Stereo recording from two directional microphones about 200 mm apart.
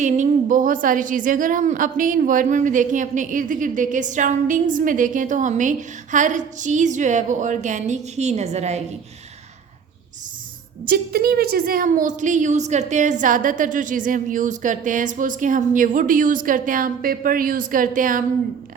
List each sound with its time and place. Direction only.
0.0 s a woman's voice: 35° right (ahead or behind)
10.8 s a woman's voice: 50° right (ahead or behind)